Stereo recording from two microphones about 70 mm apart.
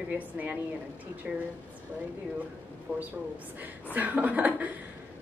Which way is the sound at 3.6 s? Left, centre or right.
Right.